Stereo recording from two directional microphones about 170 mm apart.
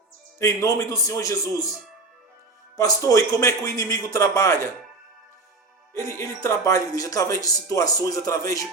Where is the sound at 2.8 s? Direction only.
20° left (ahead or behind).